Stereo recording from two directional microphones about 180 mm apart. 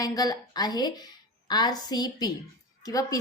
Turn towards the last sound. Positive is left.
turn(degrees=20)  # may be behind; listen again after turning